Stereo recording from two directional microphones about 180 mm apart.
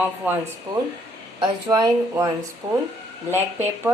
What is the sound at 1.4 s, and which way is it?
Speech, 20° right (ahead or behind).